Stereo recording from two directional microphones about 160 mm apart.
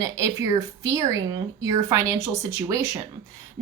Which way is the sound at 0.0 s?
20° right (ahead or behind).